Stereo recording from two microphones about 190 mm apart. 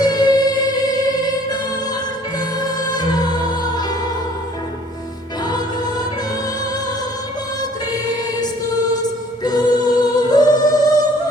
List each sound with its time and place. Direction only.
0.0 s music: 20° left (ahead or behind)
2.6 s music: 20° left (ahead or behind)
9.4 s music: 20° left (ahead or behind)